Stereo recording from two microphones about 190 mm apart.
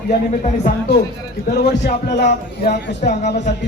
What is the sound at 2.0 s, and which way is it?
Speech, 60° left (ahead or behind).